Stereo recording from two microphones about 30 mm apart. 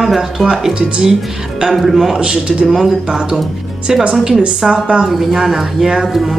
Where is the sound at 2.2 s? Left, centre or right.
Right.